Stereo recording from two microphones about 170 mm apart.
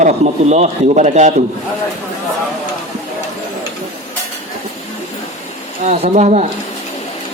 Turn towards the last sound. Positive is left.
turn(degrees=-45)  # may be behind; listen again after turning